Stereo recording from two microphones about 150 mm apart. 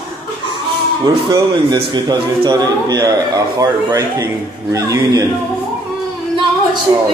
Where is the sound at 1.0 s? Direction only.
30° right (ahead or behind).